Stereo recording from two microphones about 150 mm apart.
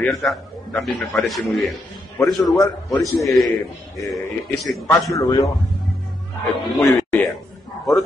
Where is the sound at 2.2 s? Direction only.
15° left (ahead or behind).